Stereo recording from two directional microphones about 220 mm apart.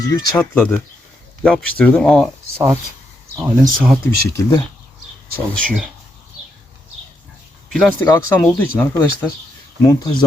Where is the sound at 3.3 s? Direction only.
15° right (ahead or behind).